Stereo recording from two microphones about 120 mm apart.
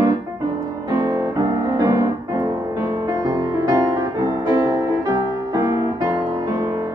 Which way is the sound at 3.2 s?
30° right (ahead or behind).